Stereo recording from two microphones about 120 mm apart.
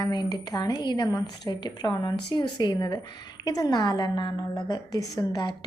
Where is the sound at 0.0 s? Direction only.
35° left (ahead or behind).